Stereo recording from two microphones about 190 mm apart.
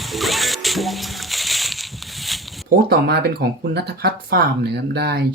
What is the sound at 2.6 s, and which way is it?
Speech, 55° right (ahead or behind).